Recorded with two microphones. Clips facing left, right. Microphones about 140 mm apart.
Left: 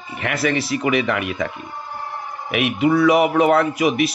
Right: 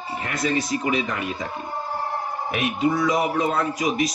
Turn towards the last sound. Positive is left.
turn(degrees=70)  # may be behind; listen again after turning